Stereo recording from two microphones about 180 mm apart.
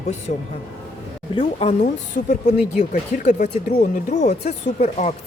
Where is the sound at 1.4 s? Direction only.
35° left (ahead or behind).